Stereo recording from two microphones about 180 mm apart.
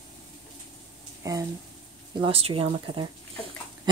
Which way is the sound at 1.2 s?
20° right (ahead or behind).